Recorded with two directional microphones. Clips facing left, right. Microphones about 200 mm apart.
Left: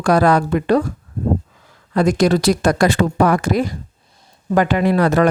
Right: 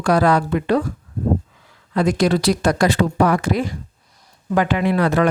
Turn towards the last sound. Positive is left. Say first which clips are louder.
# left 3 dB
turn(degrees=40)  # may be behind; listen again after turning